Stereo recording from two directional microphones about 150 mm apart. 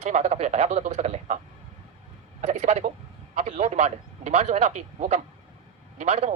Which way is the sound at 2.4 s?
45° right (ahead or behind).